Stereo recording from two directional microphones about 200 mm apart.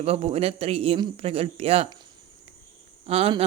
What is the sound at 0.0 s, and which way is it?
Speech, 30° right (ahead or behind).